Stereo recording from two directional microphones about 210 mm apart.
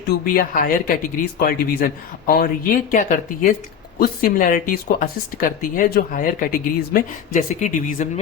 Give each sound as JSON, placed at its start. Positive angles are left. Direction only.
{"t": 0.1, "sound": "a woman's voice", "side_deg": 45}